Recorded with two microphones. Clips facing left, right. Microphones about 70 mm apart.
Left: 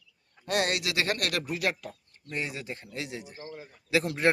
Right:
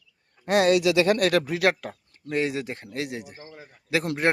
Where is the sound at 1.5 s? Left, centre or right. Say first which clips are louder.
Right 7 dB; right.